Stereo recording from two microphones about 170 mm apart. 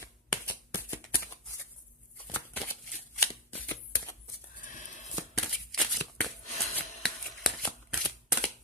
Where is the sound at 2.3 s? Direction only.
10° left (ahead or behind).